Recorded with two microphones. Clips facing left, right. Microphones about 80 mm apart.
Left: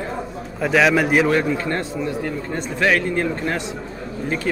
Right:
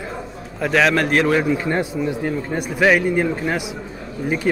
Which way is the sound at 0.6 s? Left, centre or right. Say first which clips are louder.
Left 1 dB; centre.